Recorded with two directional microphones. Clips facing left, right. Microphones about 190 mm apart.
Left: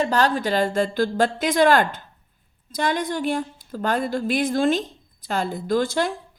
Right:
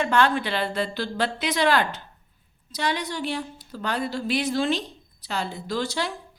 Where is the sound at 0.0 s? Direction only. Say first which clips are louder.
Left 1 dB; 40° left (ahead or behind).